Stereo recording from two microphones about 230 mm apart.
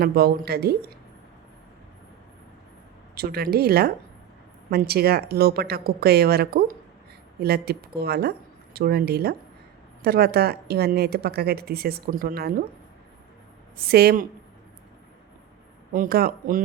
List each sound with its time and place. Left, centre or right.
0.0 s a woman's voice: right
3.2 s a woman's voice: right
13.7 s speech: right
15.9 s speech: right